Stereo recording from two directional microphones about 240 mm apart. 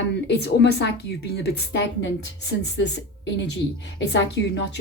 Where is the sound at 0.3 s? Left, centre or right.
Left.